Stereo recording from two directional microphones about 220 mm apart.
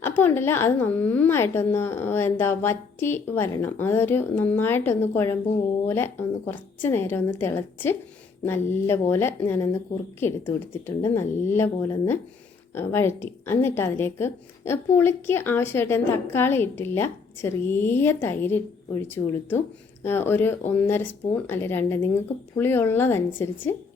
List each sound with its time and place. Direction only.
0.2 s a woman's voice: 10° left (ahead or behind)